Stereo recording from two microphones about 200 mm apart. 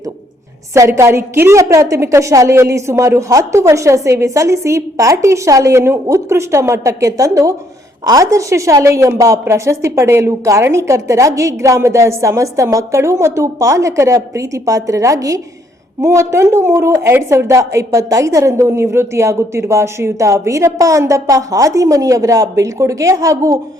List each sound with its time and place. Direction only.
0.7 s a woman's voice: 15° right (ahead or behind)